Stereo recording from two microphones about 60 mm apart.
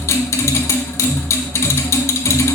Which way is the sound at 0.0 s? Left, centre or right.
Left.